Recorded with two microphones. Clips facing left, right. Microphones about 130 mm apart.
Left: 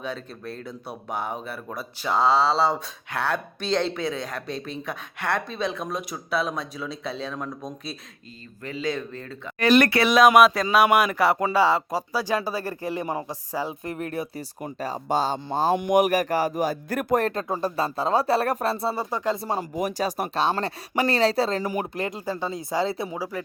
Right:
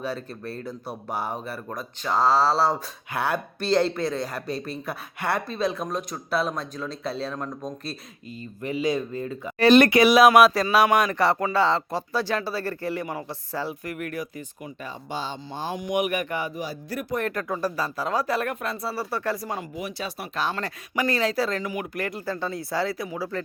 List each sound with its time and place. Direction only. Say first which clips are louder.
0.0 s speech: right 2 dB; 5° right (ahead or behind)
8.6 s speech: right 3 dB; 15° right (ahead or behind)
9.6 s speech: right 3 dB; 25° right (ahead or behind)
10.0 s speech: right 1 dB; 5° right (ahead or behind)
11.3 s speech: left 2 dB; 15° left (ahead or behind)
13.8 s speech: left 2 dB; 30° left (ahead or behind)
14.6 s speech: left 9 dB; 40° left (ahead or behind)
15.7 s speech: left 6 dB; 60° left (ahead or behind)
16.0 s speech: left 3 dB; 40° left (ahead or behind)
17.2 s speech: left 1 dB; 30° left (ahead or behind)
19.7 s speech: left 7 dB; 40° left (ahead or behind)
20.6 s speech: left 3 dB; 30° left (ahead or behind)
23.1 s speech: right 1 dB; 15° left (ahead or behind)